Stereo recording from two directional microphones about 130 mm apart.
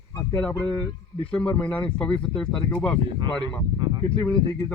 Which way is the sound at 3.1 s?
35° right (ahead or behind).